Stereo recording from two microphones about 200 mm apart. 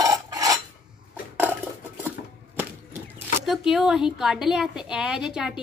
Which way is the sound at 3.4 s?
Centre (ahead or behind).